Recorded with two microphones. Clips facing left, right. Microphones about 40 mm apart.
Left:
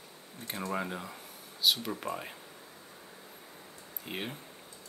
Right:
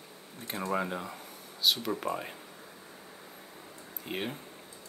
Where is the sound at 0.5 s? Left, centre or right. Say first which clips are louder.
Right 3 dB; centre.